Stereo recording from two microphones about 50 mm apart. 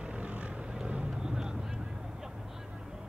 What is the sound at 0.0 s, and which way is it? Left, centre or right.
Vehicle, right.